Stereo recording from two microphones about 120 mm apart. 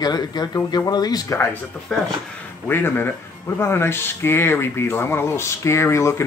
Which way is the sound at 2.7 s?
20° left (ahead or behind).